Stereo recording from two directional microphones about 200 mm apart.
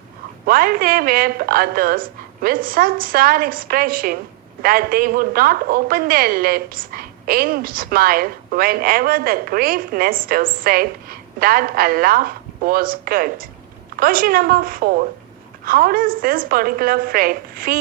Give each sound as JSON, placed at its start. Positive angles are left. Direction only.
{"t": 0.4, "sound": "a woman's voice", "side_deg": -45}